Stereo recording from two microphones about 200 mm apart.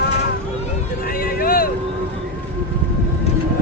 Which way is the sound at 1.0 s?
45° left (ahead or behind).